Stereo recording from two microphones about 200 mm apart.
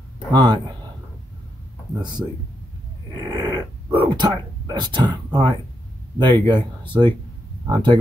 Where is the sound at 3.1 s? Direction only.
20° right (ahead or behind).